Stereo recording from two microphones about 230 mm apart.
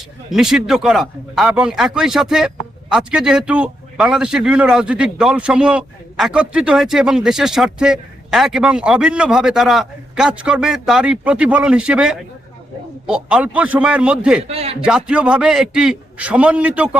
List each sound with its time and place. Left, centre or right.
0.3 s a man's voice: centre
14.4 s speech: right
14.8 s a man's voice: centre